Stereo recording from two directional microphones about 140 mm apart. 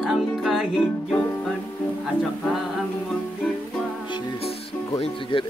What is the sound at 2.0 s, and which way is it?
Music, centre (ahead or behind).